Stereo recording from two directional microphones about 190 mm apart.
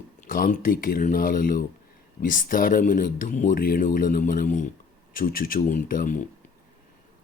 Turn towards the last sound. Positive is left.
turn(degrees=45)  # may be behind; listen again after turning